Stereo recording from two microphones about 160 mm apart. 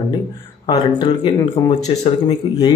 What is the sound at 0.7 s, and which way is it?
Speech, 35° left (ahead or behind).